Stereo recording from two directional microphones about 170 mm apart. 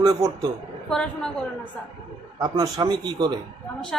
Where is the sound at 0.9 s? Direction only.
5° left (ahead or behind).